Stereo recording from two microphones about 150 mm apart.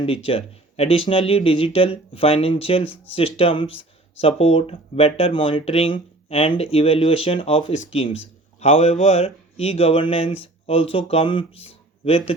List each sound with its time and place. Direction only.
0.0 s speech: 40° left (ahead or behind)